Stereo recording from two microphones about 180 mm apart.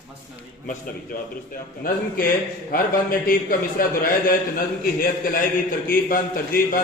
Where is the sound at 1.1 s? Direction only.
55° left (ahead or behind).